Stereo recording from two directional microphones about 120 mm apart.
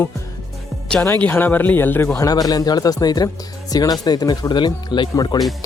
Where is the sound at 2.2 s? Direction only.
30° left (ahead or behind).